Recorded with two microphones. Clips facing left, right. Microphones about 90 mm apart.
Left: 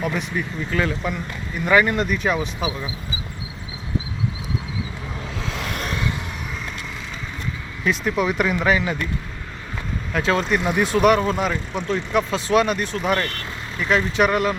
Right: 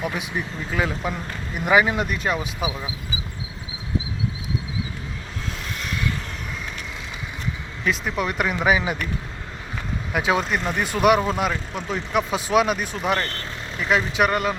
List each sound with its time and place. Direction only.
0.0 s speech: 10° right (ahead or behind)
5.4 s a sound: 90° left
7.9 s speech: centre (ahead or behind)
8.5 s speech: 10° right (ahead or behind)
10.1 s speech: 10° right (ahead or behind)
10.4 s speech: centre (ahead or behind)